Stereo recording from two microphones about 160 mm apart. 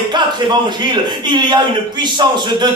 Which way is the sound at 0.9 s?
30° right (ahead or behind).